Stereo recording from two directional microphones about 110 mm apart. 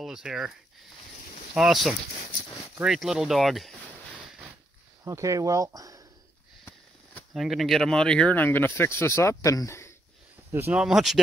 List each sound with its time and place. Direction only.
0.0 s speech: 5° right (ahead or behind)
5.0 s speech: 30° right (ahead or behind)
7.3 s speech: centre (ahead or behind); by 9.9 s 25° left (ahead or behind)
10.5 s speech: 20° right (ahead or behind)
10.8 s speech: 5° right (ahead or behind)